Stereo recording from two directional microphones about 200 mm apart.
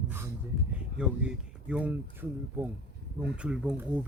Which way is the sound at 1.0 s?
5° right (ahead or behind).